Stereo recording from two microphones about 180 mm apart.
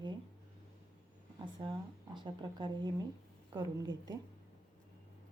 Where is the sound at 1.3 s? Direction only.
30° right (ahead or behind).